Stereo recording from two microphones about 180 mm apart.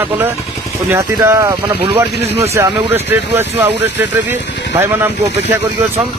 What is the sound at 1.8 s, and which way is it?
Speech, 30° right (ahead or behind).